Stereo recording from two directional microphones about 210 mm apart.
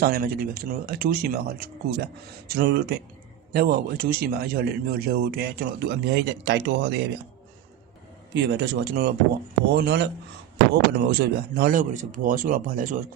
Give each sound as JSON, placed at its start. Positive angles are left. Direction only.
{"t": 0.0, "sound": "a man's voice", "side_deg": -45}
{"t": 8.3, "sound": "a man's voice", "side_deg": -55}